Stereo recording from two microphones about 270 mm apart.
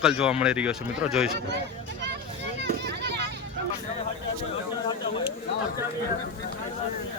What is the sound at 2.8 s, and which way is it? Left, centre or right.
Children playing, right.